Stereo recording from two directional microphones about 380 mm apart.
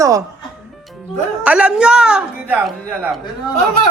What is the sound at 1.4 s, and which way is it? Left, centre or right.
A man's voice, centre.